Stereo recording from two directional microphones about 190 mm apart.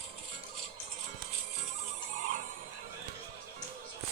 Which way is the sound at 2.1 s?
40° right (ahead or behind).